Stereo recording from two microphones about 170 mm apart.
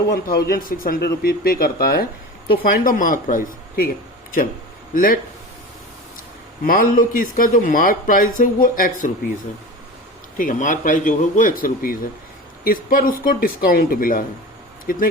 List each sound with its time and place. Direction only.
0.1 s speech: 60° left (ahead or behind)
4.9 s speech: 55° left (ahead or behind)
6.7 s speech: 55° left (ahead or behind)
10.3 s speech: 50° left (ahead or behind)